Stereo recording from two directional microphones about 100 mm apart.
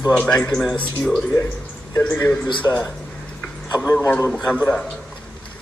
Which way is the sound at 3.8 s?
25° left (ahead or behind).